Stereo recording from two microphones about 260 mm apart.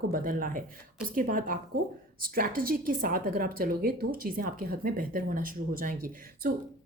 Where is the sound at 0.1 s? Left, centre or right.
Right.